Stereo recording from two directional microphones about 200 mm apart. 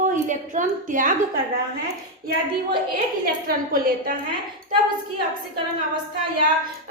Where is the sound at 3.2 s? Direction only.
45° right (ahead or behind).